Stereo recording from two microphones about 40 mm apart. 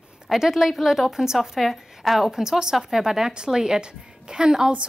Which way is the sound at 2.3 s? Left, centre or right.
Centre.